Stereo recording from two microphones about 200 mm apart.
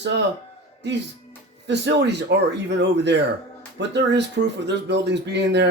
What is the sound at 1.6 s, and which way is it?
Speech, 60° right (ahead or behind).